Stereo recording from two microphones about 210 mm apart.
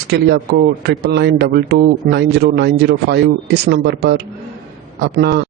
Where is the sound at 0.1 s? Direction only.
50° right (ahead or behind).